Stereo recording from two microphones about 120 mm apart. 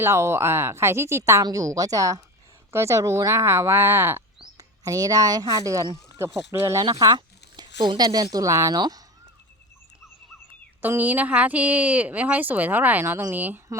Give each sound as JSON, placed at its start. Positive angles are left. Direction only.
{"t": 0.0, "sound": "a woman's voice", "side_deg": -20}
{"t": 7.1, "sound": "speech", "side_deg": -40}
{"t": 10.8, "sound": "speech", "side_deg": -15}